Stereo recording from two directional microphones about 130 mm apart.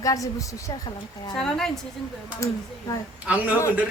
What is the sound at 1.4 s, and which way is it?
Speech, 5° left (ahead or behind).